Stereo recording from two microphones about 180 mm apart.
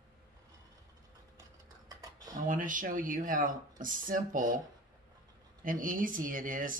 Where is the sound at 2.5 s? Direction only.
45° right (ahead or behind).